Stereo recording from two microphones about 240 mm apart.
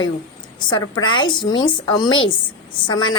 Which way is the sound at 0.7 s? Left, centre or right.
Centre.